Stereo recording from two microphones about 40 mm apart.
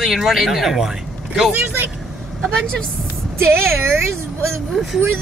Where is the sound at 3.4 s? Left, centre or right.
Right.